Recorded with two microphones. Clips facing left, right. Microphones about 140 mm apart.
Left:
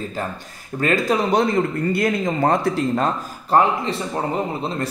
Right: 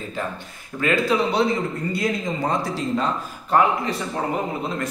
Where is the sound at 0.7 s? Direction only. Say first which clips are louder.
Left 1 dB; 40° left (ahead or behind); by 3.1 s 55° left (ahead or behind).